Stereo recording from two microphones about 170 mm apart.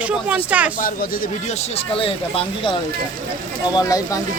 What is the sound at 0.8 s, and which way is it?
Speech, 55° left (ahead or behind).